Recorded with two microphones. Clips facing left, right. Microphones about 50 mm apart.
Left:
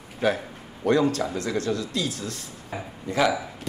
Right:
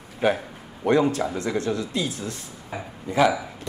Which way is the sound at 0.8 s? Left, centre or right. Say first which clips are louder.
Right 1 dB; right.